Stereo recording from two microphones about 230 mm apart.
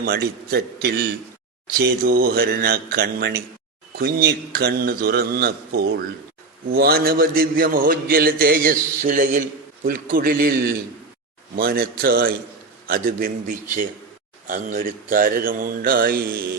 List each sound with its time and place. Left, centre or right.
0.0 s a man's voice: right
11.5 s a man's voice: right
14.4 s a man's voice: right